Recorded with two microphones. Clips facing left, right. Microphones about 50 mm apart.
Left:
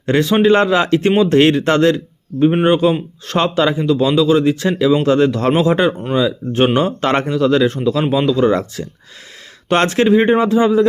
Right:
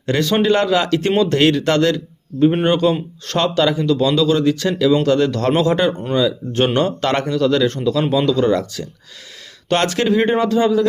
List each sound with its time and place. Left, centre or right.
0.0 s speech: left
2.4 s speech: centre
7.1 s speech: left
8.5 s speech: left